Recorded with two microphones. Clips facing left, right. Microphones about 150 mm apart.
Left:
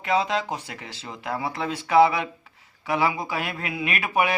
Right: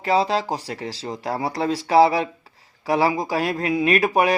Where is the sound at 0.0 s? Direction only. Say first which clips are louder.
Right 4 dB; 35° right (ahead or behind).